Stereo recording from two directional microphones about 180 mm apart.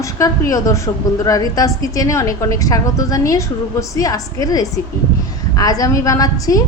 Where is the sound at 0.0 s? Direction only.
20° left (ahead or behind).